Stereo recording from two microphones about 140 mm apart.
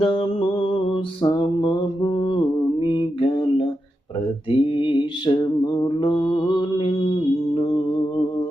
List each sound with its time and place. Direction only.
0.0 s mantra: 40° left (ahead or behind)